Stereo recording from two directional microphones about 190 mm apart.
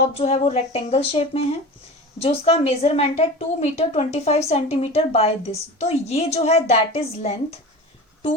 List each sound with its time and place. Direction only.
0.1 s a woman's voice: 35° left (ahead or behind)